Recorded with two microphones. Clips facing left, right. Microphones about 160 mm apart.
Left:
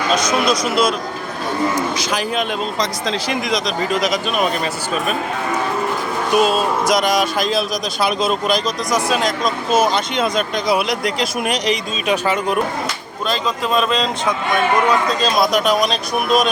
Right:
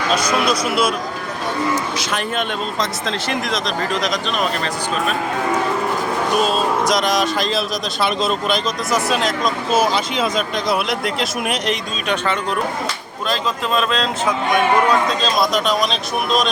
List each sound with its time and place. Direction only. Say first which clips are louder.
0.3 s speech: left 1 dB; 10° right (ahead or behind)
2.0 s speech: left 2 dB; centre (ahead or behind)
6.3 s speech: left 4 dB; 5° left (ahead or behind)
12.1 s speech: left 3 dB; 10° left (ahead or behind)
15.2 s speech: left 2 dB; centre (ahead or behind)